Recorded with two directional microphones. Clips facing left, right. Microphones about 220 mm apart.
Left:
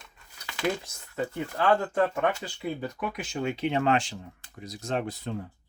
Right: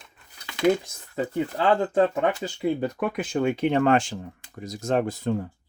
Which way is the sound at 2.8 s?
55° right (ahead or behind).